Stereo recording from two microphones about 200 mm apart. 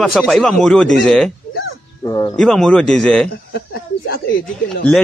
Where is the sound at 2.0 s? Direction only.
20° left (ahead or behind).